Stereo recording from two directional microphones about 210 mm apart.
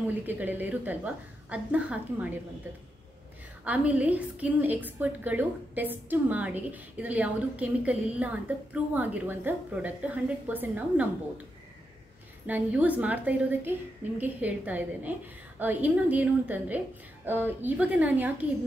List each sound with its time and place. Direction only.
0.1 s a woman's voice: 10° right (ahead or behind)
3.6 s a woman's voice: 5° right (ahead or behind)
12.4 s a woman's voice: 5° right (ahead or behind)